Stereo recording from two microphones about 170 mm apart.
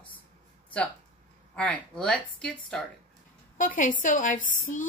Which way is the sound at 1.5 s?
5° left (ahead or behind).